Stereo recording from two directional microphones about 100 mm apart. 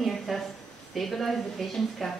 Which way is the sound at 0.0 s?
Centre (ahead or behind).